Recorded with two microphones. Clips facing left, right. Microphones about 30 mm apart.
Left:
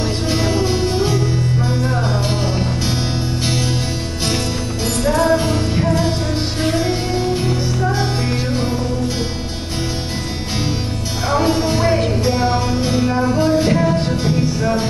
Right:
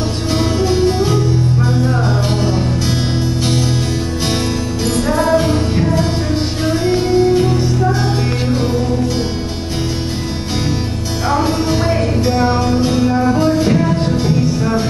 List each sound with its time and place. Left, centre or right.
0.3 s music: centre
5.0 s music: right
6.9 s music: centre
11.2 s music: centre
13.6 s music: centre